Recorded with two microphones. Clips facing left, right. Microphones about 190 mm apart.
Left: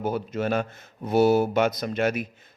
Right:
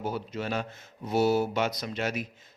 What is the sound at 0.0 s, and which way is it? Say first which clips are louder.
Speech: left 6 dB; 50° left (ahead or behind).